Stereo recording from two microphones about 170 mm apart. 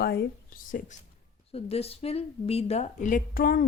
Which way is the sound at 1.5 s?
35° left (ahead or behind).